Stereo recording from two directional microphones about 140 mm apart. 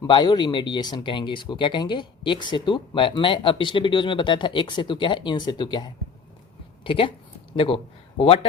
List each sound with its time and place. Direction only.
0.1 s speech: 35° left (ahead or behind)